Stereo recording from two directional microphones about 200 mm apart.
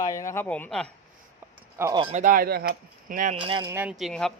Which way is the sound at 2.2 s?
45° right (ahead or behind).